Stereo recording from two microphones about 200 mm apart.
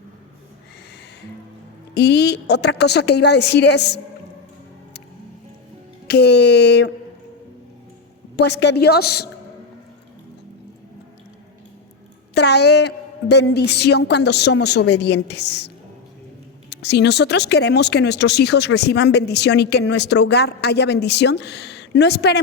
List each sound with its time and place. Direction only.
2.0 s speech: 55° left (ahead or behind)
6.1 s speech: 55° left (ahead or behind)
8.4 s speech: 60° left (ahead or behind)
12.3 s speech: 55° left (ahead or behind)